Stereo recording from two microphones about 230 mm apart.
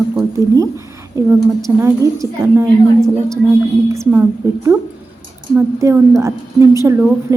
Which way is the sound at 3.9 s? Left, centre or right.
Centre.